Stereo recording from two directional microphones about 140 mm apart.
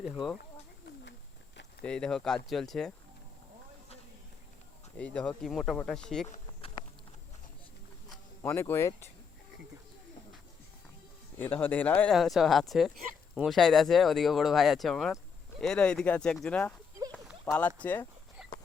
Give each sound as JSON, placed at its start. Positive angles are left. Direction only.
{"t": 0.0, "sound": "speech", "side_deg": 0}
{"t": 1.8, "sound": "speech", "side_deg": 5}
{"t": 4.9, "sound": "speech", "side_deg": 10}
{"t": 8.4, "sound": "speech", "side_deg": 20}
{"t": 11.3, "sound": "speech", "side_deg": 15}
{"t": 12.1, "sound": "speech", "side_deg": 0}